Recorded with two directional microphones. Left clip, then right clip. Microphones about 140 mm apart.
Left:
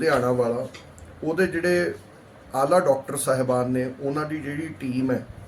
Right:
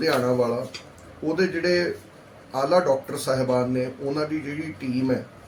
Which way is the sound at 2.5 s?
40° left (ahead or behind).